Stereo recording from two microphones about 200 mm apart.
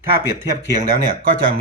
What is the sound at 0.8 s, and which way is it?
Speech, 45° right (ahead or behind).